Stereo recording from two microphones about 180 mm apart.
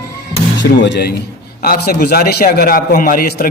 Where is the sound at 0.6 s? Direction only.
75° left (ahead or behind).